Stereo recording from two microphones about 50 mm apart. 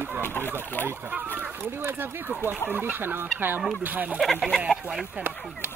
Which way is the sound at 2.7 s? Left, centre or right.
Right.